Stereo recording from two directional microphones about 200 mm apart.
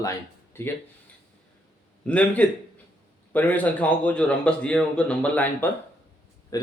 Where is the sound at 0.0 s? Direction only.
15° left (ahead or behind).